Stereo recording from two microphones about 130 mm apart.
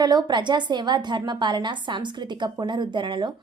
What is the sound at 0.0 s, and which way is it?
A woman's voice, 35° right (ahead or behind).